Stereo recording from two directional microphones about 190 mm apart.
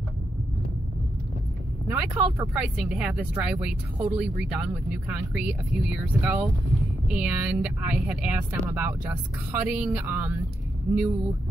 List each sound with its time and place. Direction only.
1.9 s speech: 15° right (ahead or behind)
2.5 s speech: centre (ahead or behind)
10.9 s speech: 15° right (ahead or behind)